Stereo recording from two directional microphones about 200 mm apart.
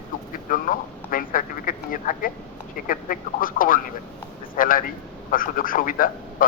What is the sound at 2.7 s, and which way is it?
A man's voice, 45° left (ahead or behind).